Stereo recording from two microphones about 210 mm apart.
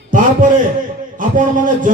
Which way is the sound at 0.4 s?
40° right (ahead or behind).